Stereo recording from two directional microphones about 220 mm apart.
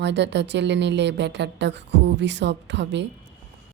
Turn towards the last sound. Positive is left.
turn(degrees=-55)  # may be behind; listen again after turning